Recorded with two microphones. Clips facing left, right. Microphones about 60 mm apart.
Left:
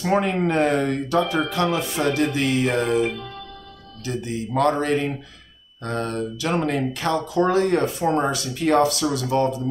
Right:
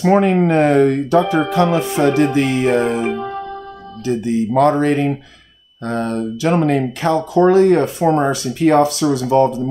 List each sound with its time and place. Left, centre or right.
0.0 s speech: right
4.6 s speech: right